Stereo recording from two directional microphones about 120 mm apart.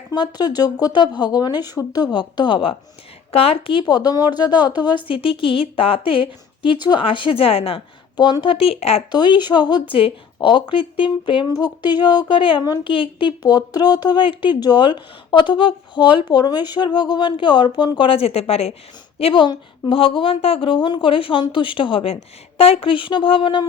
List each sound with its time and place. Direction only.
0.1 s a woman's voice: 35° left (ahead or behind); by 7.8 s 55° left (ahead or behind)
8.1 s a woman's voice: 40° left (ahead or behind); by 9.0 s 55° left (ahead or behind)
9.1 s a woman's voice: 40° left (ahead or behind); by 18.8 s 60° left (ahead or behind)
19.2 s a woman's voice: 40° left (ahead or behind)